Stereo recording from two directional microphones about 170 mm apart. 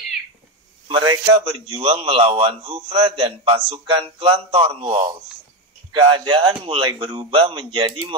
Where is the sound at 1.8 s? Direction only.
35° right (ahead or behind).